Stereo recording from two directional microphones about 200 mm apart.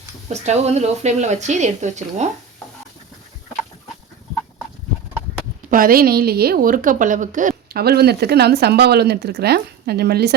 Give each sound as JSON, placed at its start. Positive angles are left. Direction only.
{"t": 0.3, "sound": "speech", "side_deg": -35}
{"t": 5.7, "sound": "a woman's voice", "side_deg": -45}